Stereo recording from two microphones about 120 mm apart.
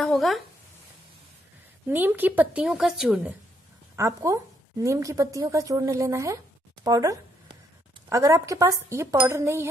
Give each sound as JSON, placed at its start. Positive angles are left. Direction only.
{"t": 0.0, "sound": "a sound", "side_deg": 0}
{"t": 1.9, "sound": "speech", "side_deg": -15}
{"t": 3.9, "sound": "a woman's voice", "side_deg": -25}